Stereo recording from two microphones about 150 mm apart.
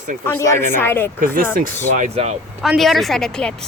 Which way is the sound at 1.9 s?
50° right (ahead or behind).